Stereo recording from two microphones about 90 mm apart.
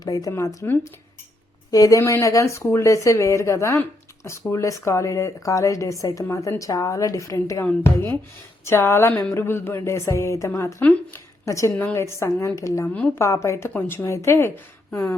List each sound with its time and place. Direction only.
0.0 s speech: 40° left (ahead or behind)
1.7 s speech: 40° left (ahead or behind)
7.6 s a woman's voice: 25° left (ahead or behind)